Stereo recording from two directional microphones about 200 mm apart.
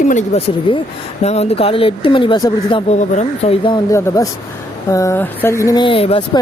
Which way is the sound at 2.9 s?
35° left (ahead or behind).